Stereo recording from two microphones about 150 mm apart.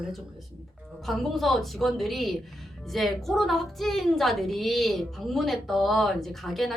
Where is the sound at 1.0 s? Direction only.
Centre (ahead or behind).